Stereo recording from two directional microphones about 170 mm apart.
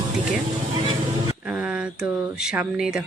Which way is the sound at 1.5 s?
5° right (ahead or behind).